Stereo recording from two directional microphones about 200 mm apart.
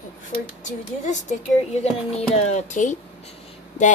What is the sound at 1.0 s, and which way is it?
Speech, 35° left (ahead or behind).